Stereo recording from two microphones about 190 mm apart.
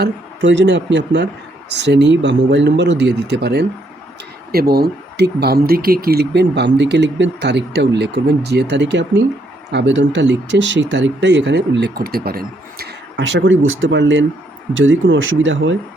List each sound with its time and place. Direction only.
0.0 s speech: 70° right (ahead or behind)
14.7 s speech: 85° right